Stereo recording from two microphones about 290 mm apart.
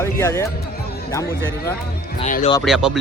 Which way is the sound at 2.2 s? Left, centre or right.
Left.